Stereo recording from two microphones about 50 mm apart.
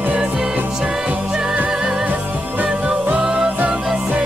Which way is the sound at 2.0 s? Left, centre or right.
Right.